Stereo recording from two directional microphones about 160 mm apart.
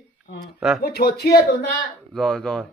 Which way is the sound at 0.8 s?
85° left.